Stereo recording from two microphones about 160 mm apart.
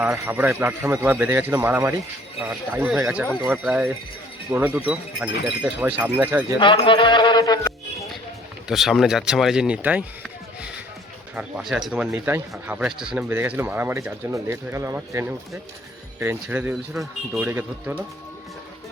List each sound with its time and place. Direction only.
0.0 s speech: 10° right (ahead or behind)
6.6 s music: 30° left (ahead or behind)
8.6 s speech: centre (ahead or behind)
11.3 s speech: 5° right (ahead or behind)